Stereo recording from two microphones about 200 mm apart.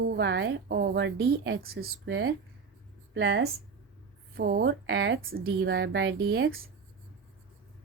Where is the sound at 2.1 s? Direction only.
80° right.